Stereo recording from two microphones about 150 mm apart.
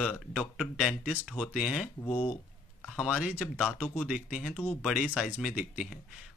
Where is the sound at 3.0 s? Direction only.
5° right (ahead or behind).